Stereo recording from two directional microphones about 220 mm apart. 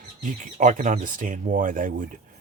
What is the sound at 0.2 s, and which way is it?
Speech, 35° right (ahead or behind).